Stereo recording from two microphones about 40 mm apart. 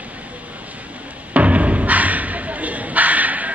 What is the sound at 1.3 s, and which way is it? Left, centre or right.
Music, right.